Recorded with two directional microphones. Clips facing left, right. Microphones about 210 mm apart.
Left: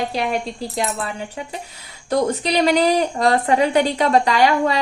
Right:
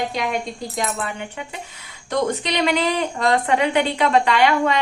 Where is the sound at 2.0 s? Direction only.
35° left (ahead or behind).